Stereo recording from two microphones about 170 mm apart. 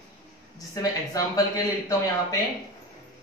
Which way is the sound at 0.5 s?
20° left (ahead or behind).